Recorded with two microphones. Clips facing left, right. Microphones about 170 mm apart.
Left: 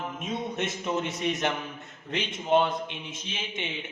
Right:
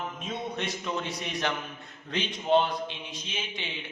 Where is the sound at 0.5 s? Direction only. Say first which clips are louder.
Left 4 dB; 20° left (ahead or behind).